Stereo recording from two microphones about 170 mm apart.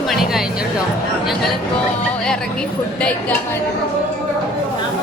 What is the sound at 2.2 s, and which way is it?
Speech, 5° left (ahead or behind).